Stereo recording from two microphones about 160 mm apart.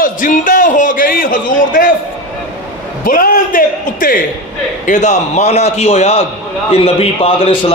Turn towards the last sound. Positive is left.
turn(degrees=35)  # may be behind; listen again after turning